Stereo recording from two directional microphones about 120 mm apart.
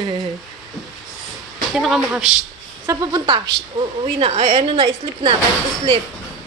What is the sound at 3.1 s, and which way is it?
A woman's voice, 40° right (ahead or behind).